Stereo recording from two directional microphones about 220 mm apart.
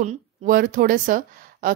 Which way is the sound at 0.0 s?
35° right (ahead or behind).